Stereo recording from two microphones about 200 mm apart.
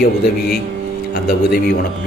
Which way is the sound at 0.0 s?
50° left (ahead or behind).